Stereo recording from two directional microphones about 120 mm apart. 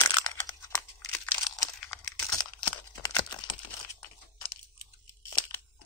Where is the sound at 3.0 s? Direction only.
35° left (ahead or behind).